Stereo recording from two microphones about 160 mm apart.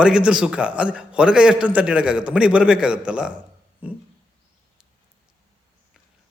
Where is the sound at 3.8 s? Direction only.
10° right (ahead or behind).